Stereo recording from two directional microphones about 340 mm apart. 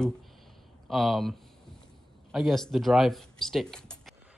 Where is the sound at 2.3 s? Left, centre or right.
Centre.